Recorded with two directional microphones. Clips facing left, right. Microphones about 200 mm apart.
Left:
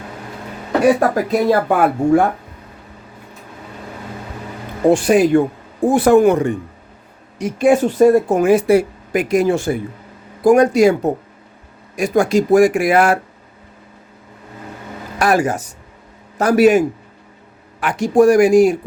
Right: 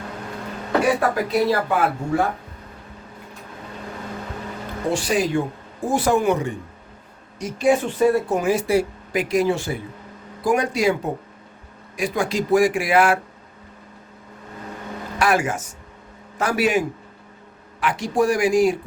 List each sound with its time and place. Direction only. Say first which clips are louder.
0.9 s speech: left 4 dB; 50° left (ahead or behind)
4.9 s speech: left 10 dB; 55° left (ahead or behind)
15.2 s speech: left 5 dB; 40° left (ahead or behind)